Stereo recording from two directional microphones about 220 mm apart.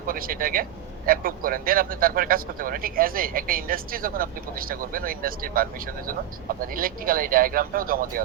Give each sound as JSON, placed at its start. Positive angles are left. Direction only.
{"t": 0.1, "sound": "speech", "side_deg": -40}